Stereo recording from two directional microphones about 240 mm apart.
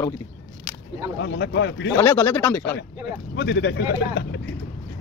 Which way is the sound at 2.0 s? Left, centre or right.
Centre.